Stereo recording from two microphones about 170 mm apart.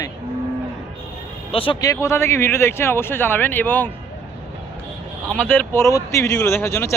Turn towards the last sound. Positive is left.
turn(degrees=15)  # may be behind; listen again after turning